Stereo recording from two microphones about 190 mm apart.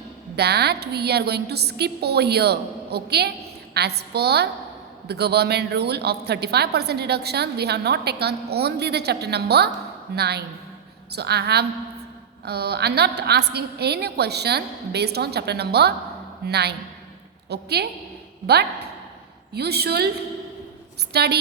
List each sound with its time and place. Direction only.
0.3 s a woman's voice: 60° right (ahead or behind)
19.5 s a woman's voice: 55° right (ahead or behind)
21.1 s a woman's voice: 60° right (ahead or behind)